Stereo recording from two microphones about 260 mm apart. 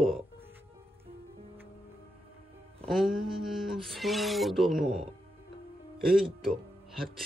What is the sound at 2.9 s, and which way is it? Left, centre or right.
Speech, centre.